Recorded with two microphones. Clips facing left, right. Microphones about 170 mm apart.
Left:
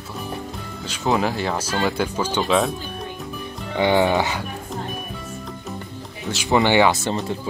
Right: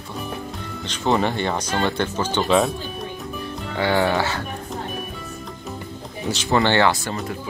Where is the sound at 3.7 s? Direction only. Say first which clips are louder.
Left 2 dB; 20° left (ahead or behind).